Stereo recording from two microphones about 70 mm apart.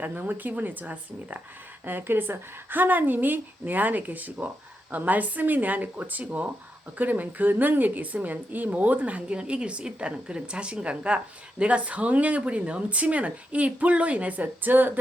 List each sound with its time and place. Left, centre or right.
0.0 s a woman's voice: right